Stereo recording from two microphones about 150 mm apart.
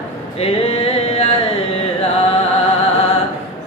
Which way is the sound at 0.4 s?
40° left (ahead or behind).